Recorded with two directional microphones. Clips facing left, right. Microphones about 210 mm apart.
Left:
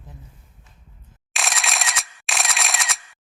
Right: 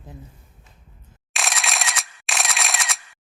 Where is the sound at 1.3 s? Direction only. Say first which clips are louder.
Even; centre (ahead or behind).